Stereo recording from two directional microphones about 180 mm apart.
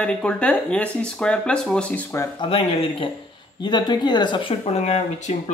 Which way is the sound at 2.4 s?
30° left (ahead or behind).